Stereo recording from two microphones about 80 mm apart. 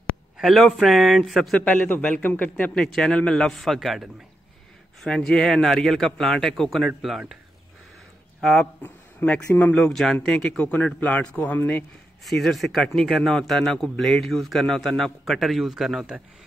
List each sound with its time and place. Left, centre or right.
0.4 s a man's voice: centre
1.6 s a man's voice: centre
8.4 s speech: centre
8.8 s speech: centre
9.8 s a man's voice: centre
10.6 s speech: centre
12.3 s a man's voice: centre